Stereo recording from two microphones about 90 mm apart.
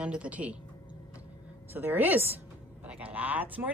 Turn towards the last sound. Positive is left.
turn(degrees=-20)  # may be behind; listen again after turning